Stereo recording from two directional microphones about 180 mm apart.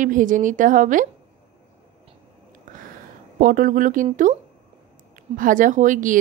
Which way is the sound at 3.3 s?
50° right (ahead or behind).